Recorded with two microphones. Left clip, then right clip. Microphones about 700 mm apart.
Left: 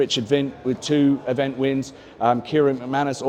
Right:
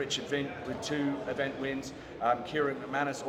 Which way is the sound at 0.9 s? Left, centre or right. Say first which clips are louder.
Left 13 dB; left.